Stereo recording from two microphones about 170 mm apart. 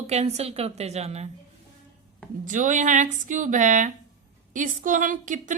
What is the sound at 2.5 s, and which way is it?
A woman's voice, 50° right (ahead or behind).